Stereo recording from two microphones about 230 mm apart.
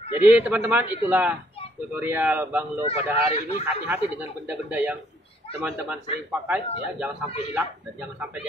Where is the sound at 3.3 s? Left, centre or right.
Left.